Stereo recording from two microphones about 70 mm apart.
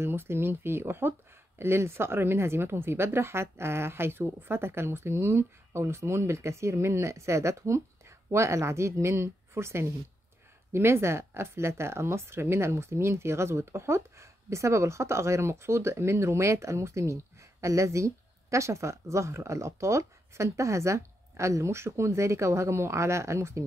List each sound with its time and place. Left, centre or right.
0.0 s a woman's voice: right